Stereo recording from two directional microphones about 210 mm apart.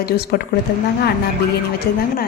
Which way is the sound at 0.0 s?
45° left (ahead or behind).